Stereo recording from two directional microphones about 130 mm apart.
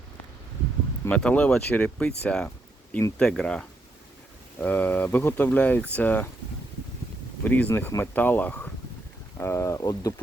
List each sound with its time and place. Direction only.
1.0 s speech: 10° left (ahead or behind)
7.4 s speech: 10° left (ahead or behind)